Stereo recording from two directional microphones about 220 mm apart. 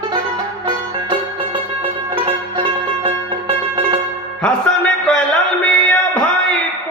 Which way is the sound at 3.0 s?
25° right (ahead or behind).